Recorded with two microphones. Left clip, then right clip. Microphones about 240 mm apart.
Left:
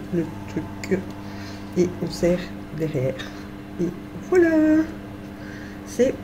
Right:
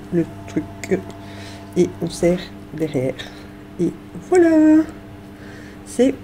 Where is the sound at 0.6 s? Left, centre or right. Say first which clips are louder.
Right 6 dB; right.